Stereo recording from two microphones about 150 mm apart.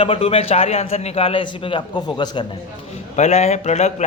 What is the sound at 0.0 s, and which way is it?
A man's voice, 40° left (ahead or behind).